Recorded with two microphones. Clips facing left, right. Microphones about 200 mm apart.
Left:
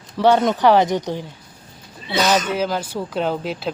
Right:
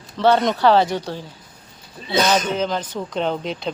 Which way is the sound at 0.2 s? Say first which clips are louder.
Left 1 dB; 10° left (ahead or behind).